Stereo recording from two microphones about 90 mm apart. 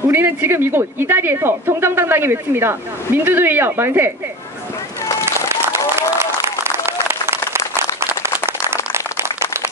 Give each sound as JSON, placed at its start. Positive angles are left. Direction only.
{"t": 0.1, "sound": "a woman's voice", "side_deg": -25}
{"t": 5.5, "sound": "applause", "side_deg": -30}
{"t": 8.9, "sound": "a sound", "side_deg": -30}